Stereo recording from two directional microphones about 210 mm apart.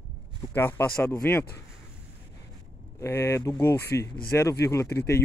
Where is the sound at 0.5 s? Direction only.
10° left (ahead or behind).